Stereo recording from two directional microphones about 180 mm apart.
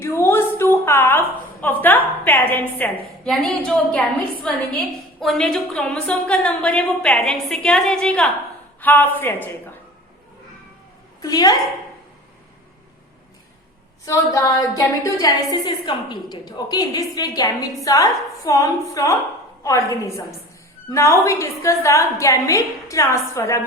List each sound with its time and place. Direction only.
0.0 s a sound: 15° left (ahead or behind)
1.6 s a woman's voice: 10° left (ahead or behind)
11.2 s a woman's voice: 20° left (ahead or behind)
14.0 s a woman's voice: 15° left (ahead or behind)